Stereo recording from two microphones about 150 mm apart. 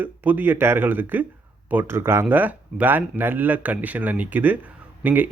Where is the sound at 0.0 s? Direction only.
10° right (ahead or behind).